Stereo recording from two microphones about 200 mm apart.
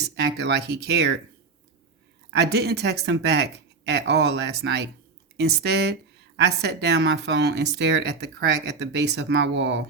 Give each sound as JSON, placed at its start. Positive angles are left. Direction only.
{"t": 0.0, "sound": "speech", "side_deg": -55}
{"t": 2.3, "sound": "a woman's voice", "side_deg": -55}